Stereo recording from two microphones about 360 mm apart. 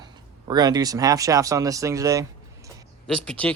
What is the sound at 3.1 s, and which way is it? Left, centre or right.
Speech, centre.